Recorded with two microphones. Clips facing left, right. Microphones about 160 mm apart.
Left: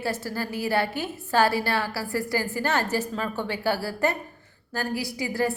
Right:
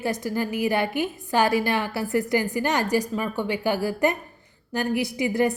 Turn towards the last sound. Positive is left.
turn(degrees=-20)  # may be behind; listen again after turning